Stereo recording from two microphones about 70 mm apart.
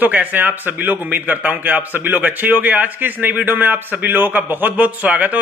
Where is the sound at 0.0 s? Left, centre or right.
Right.